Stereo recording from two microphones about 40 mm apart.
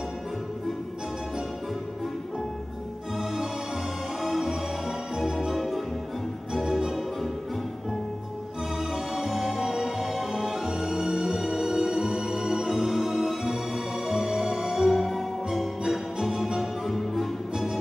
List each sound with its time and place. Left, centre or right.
4.2 s music: centre
8.9 s music: centre
16.2 s music: centre
16.9 s music: centre